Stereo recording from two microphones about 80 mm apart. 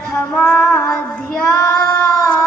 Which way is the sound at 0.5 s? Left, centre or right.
Left.